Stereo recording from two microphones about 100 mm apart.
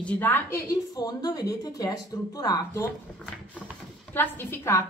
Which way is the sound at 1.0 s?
40° left (ahead or behind).